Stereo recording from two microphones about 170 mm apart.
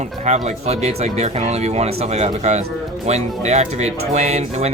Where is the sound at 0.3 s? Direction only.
45° right (ahead or behind).